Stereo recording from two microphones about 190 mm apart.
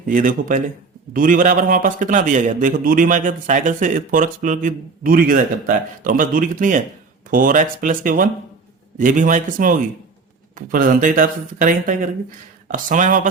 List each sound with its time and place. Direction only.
0.1 s a man's voice: 45° right (ahead or behind)